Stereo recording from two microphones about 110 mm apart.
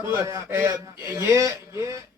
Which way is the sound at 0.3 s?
30° right (ahead or behind).